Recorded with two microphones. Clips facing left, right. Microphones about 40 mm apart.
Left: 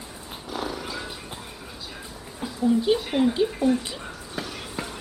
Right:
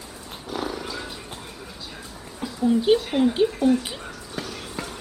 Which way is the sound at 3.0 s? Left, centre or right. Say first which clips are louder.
Right 1 dB; centre.